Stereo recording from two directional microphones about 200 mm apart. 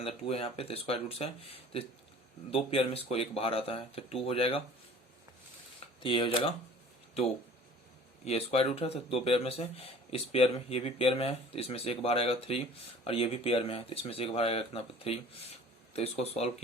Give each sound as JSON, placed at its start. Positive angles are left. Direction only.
{"t": 0.0, "sound": "speech", "side_deg": 30}
{"t": 6.0, "sound": "speech", "side_deg": 25}
{"t": 8.2, "sound": "speech", "side_deg": 30}